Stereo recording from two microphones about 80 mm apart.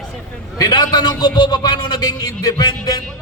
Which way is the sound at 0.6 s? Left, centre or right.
Left.